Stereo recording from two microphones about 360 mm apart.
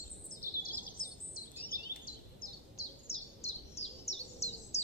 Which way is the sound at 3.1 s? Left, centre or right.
Centre.